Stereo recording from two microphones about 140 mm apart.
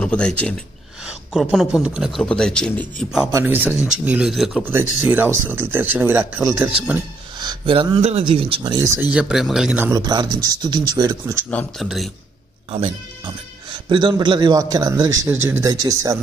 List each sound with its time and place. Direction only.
0.0 s speech: 10° left (ahead or behind)
1.0 s speech: 5° right (ahead or behind)
3.4 s speech: 10° right (ahead or behind)
4.6 s speech: 15° right (ahead or behind)
7.3 s speech: 35° right (ahead or behind)
9.1 s speech: 5° right (ahead or behind)
9.9 s speech: 30° right (ahead or behind)
11.8 s speech: centre (ahead or behind)
13.8 s speech: 35° right (ahead or behind)